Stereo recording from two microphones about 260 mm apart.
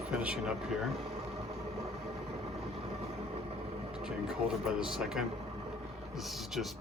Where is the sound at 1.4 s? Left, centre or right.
Right.